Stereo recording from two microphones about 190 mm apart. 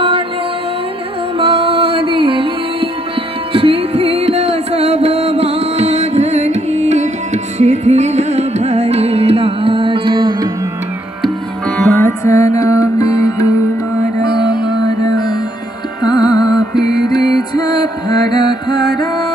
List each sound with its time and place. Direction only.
1.4 s music: 30° right (ahead or behind)
11.7 s music: 10° left (ahead or behind)
16.0 s music: 20° left (ahead or behind)